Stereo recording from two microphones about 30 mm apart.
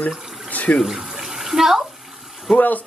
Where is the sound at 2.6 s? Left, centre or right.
Left.